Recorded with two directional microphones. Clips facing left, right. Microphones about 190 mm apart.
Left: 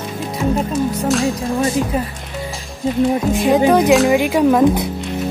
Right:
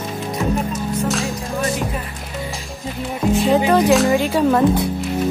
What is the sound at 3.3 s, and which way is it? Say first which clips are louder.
A woman's voice: right 1 dB; 15° left (ahead or behind).